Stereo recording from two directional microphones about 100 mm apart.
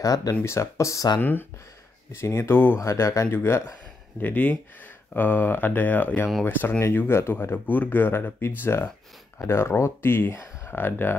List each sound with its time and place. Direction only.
0.0 s speech: 35° left (ahead or behind)
2.1 s speech: 25° left (ahead or behind)